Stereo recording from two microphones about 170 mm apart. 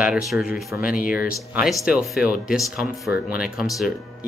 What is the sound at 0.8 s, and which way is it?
Speech, 55° left (ahead or behind).